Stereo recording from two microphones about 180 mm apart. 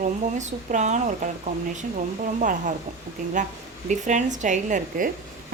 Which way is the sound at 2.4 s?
45° right (ahead or behind).